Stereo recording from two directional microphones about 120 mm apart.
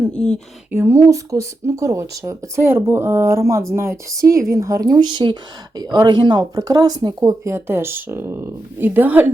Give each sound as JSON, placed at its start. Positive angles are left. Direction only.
{"t": 0.1, "sound": "speech", "side_deg": 10}
{"t": 0.7, "sound": "speech", "side_deg": -20}